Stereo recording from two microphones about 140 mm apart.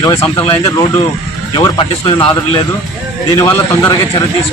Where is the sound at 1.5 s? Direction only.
35° left (ahead or behind).